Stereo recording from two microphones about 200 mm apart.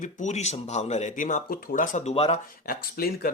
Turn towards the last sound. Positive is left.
turn(degrees=50)  # may be behind; listen again after turning